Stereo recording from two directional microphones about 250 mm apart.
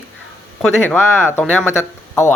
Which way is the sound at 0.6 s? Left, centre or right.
Centre.